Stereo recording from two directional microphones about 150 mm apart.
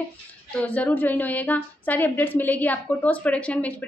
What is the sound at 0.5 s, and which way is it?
A woman's voice, 10° left (ahead or behind).